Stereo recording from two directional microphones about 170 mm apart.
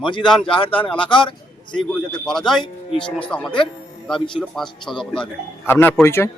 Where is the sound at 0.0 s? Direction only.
30° left (ahead or behind).